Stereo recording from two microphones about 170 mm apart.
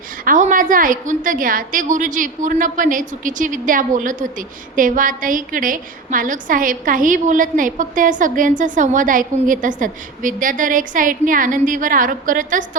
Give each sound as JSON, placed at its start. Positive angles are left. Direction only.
{"t": 0.3, "sound": "a woman's voice", "side_deg": -50}